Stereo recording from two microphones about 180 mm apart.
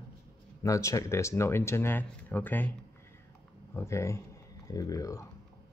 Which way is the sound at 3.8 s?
15° left (ahead or behind).